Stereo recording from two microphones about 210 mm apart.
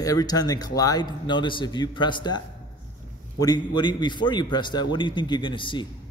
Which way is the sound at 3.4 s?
20° left (ahead or behind).